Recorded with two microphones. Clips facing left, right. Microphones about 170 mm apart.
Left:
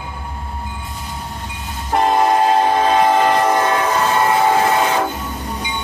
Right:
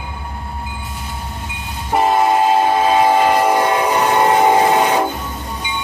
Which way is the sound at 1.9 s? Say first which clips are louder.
Even; 5° right (ahead or behind).